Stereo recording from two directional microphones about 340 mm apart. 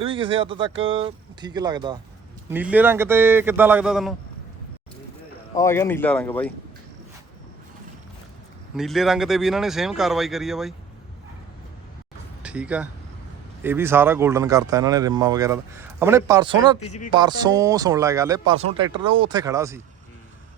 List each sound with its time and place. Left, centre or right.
0.0 s speech: centre
5.5 s speech: centre
8.7 s speech: centre
12.4 s speech: centre